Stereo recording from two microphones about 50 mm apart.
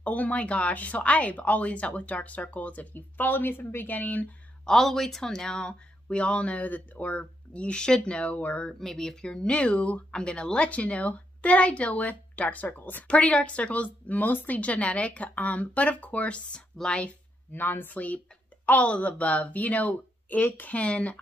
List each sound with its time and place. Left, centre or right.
0.0 s speech: left
4.6 s speech: centre; by 8.6 s left
8.6 s speech: centre; by 13.0 s left
13.0 s speech: left
14.6 s speech: left
17.5 s speech: left